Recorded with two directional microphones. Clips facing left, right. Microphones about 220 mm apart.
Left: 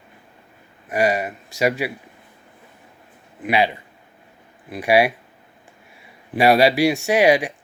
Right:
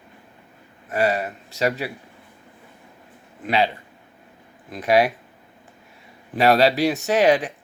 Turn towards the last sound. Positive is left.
turn(degrees=10)  # may be behind; listen again after turning